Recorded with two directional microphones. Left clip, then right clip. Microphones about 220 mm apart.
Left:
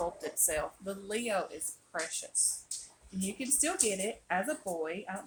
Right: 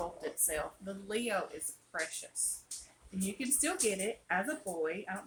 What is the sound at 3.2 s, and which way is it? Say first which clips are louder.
Speech: left 2 dB; 15° left (ahead or behind).